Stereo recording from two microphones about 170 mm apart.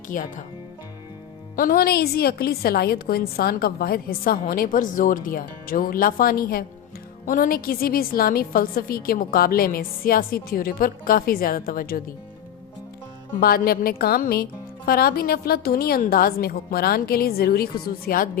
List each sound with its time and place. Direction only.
0.1 s speech: 50° left (ahead or behind)
1.5 s a woman's voice: 60° left (ahead or behind)
13.4 s a woman's voice: 65° left (ahead or behind)